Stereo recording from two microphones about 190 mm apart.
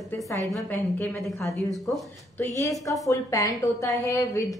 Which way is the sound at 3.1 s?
15° left (ahead or behind).